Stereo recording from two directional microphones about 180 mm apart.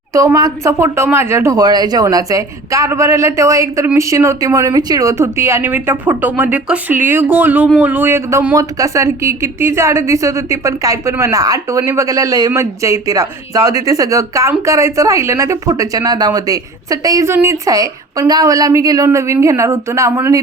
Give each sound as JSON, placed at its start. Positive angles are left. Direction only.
{"t": 0.1, "sound": "speech", "side_deg": -20}